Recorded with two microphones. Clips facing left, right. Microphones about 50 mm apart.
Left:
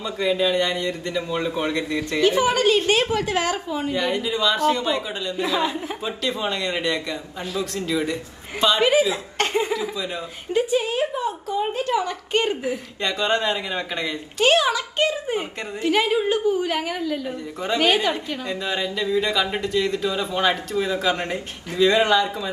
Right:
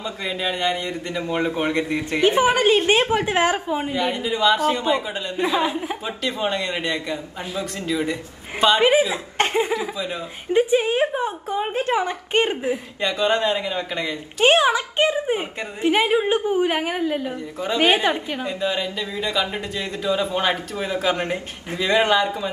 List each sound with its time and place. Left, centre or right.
0.0 s a man's voice: right
19.6 s speech: right